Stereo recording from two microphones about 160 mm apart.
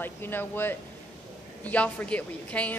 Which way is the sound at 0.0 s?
15° left (ahead or behind).